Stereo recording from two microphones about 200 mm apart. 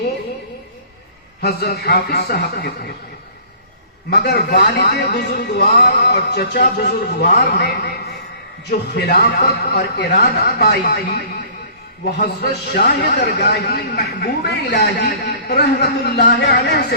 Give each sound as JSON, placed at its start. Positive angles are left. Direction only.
{"t": 1.4, "sound": "a man's voice", "side_deg": 50}
{"t": 4.1, "sound": "a man's voice", "side_deg": 55}
{"t": 12.2, "sound": "a man's voice", "side_deg": 55}